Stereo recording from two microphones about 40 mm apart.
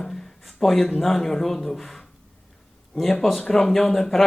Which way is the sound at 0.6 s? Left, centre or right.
Centre.